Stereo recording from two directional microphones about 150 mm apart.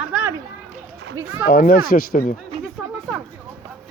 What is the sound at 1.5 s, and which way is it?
Speech, 75° left (ahead or behind).